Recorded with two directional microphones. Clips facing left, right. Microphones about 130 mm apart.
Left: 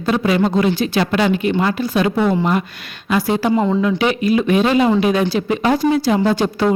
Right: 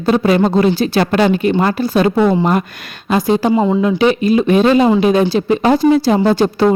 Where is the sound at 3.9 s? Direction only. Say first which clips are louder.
Right 4 dB; 30° right (ahead or behind).